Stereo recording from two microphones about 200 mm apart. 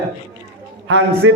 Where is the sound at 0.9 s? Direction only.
70° right (ahead or behind).